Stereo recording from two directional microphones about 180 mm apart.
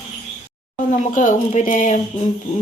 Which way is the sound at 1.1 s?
45° left (ahead or behind).